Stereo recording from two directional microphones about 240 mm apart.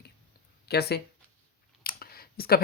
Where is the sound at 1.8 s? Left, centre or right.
Left.